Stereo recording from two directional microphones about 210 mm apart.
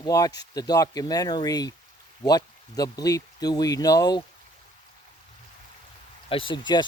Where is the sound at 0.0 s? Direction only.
20° left (ahead or behind).